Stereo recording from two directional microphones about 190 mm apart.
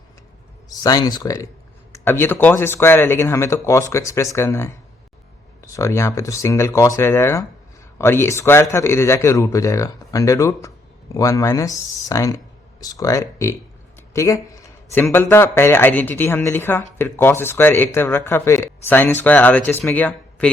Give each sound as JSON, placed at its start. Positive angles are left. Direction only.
{"t": 0.7, "sound": "speech", "side_deg": 20}
{"t": 5.7, "sound": "speech", "side_deg": 15}